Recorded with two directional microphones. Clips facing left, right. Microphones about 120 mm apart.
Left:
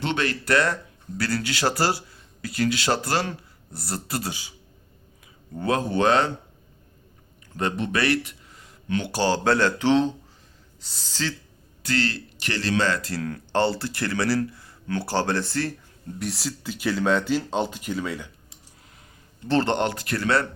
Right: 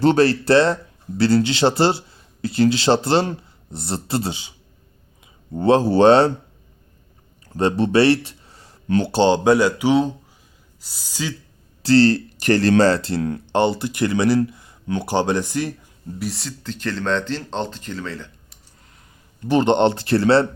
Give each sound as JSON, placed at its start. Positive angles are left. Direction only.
{"t": 0.0, "sound": "speech", "side_deg": -40}
{"t": 5.5, "sound": "speech", "side_deg": -30}
{"t": 7.4, "sound": "speech", "side_deg": -35}
{"t": 11.8, "sound": "speech", "side_deg": -35}
{"t": 16.1, "sound": "speech", "side_deg": 0}
{"t": 19.5, "sound": "speech", "side_deg": -20}